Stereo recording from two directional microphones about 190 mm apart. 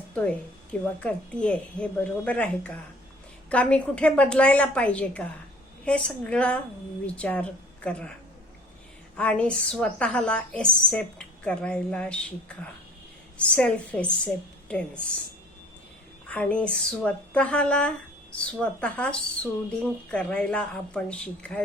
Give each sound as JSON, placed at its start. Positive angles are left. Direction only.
{"t": 0.1, "sound": "a woman's voice", "side_deg": 5}
{"t": 9.1, "sound": "a woman's voice", "side_deg": 5}
{"t": 16.3, "sound": "a woman's voice", "side_deg": 5}